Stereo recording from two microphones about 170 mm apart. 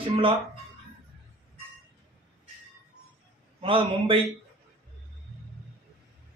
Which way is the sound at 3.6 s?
30° right (ahead or behind).